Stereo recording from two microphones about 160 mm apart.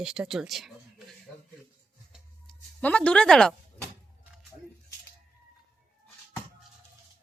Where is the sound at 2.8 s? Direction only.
10° left (ahead or behind).